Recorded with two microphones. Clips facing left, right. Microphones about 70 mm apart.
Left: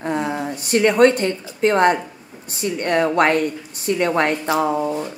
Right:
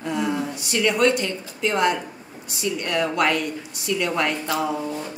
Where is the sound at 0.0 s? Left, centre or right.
Left.